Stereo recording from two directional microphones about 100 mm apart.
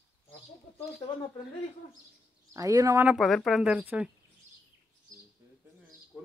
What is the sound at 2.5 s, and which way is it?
Speech, 35° right (ahead or behind).